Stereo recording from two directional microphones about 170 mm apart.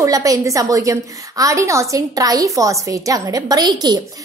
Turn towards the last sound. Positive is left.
turn(degrees=-25)  # may be behind; listen again after turning